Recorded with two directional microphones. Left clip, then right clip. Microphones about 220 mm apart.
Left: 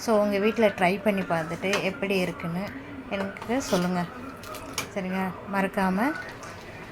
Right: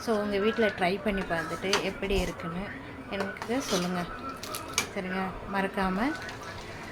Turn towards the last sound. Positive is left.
turn(degrees=15)  # may be behind; listen again after turning